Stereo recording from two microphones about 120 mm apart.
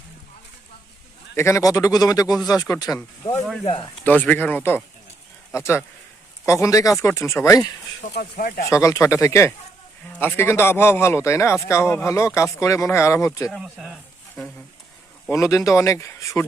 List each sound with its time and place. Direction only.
1.4 s speech: 25° left (ahead or behind)
4.0 s speech: 15° left (ahead or behind)
8.0 s speech: 90° left
8.6 s speech: 25° left (ahead or behind)
13.5 s speech: centre (ahead or behind)
15.3 s speech: 25° left (ahead or behind)